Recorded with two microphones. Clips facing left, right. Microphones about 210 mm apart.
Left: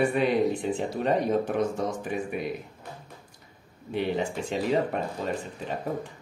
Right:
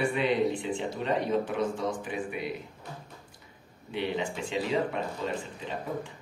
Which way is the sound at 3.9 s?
45° left (ahead or behind).